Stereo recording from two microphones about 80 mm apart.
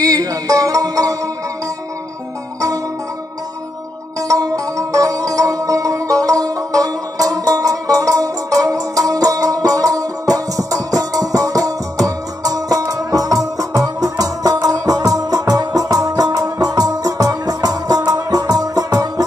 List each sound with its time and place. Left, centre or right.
0.0 s music: right
4.2 s music: right